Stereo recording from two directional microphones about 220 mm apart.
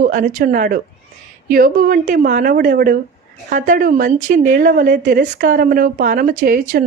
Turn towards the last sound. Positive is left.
turn(degrees=-40)  # may be behind; listen again after turning